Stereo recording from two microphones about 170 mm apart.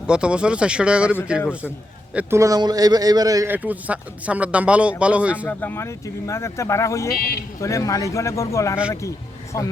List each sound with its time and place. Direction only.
0.1 s speech: 5° right (ahead or behind)
2.1 s a man's voice: 15° right (ahead or behind)
5.5 s speech: 10° left (ahead or behind)